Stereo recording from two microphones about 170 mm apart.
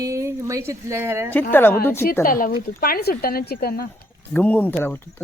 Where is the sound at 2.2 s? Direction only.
55° left (ahead or behind).